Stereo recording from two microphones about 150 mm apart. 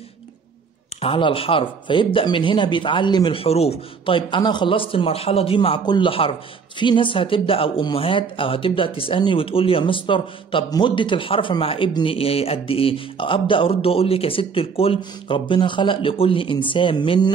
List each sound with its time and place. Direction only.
1.0 s speech: 35° left (ahead or behind)